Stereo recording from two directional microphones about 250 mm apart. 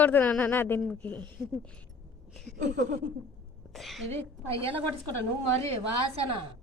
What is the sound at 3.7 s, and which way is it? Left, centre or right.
Speech, centre.